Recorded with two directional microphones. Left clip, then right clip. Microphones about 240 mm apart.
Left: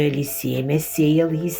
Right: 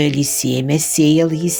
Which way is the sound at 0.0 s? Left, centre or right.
Right.